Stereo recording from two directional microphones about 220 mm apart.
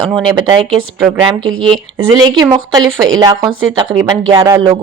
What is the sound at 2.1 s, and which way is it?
Speech, 15° right (ahead or behind).